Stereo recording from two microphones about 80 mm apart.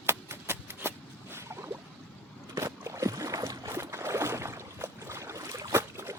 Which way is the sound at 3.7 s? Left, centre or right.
Right.